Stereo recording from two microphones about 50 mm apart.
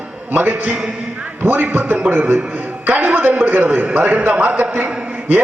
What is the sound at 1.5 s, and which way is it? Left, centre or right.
A man's voice, right.